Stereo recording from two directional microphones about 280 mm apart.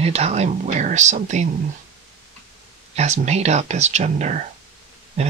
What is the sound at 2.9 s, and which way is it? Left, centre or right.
Speech, right.